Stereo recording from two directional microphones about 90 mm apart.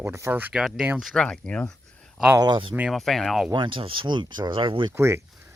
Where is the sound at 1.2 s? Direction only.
10° left (ahead or behind).